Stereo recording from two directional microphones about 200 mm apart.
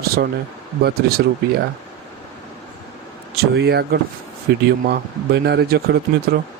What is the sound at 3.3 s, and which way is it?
Speech, 55° right (ahead or behind).